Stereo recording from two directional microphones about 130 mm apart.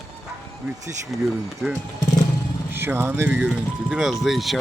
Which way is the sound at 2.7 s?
15° right (ahead or behind).